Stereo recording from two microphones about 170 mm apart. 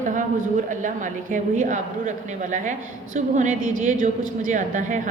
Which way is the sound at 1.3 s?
50° right (ahead or behind).